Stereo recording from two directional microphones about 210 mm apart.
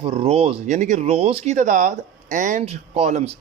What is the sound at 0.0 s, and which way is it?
Speech, 25° right (ahead or behind).